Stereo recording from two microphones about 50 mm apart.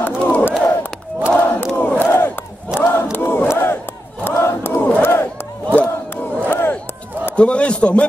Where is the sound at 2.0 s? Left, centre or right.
Left.